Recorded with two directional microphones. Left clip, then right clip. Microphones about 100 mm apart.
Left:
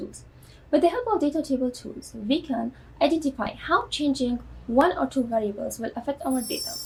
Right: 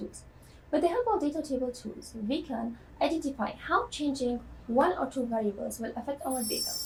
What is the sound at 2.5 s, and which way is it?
A woman's voice, 55° right (ahead or behind).